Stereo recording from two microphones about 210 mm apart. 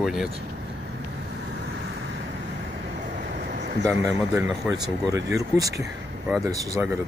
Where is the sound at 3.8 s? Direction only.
15° right (ahead or behind).